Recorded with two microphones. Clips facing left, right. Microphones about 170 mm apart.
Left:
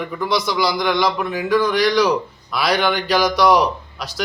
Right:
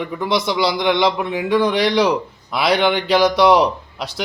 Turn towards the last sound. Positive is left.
turn(degrees=-25)  # may be behind; listen again after turning